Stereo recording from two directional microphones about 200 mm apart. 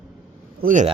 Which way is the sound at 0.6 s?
40° right (ahead or behind).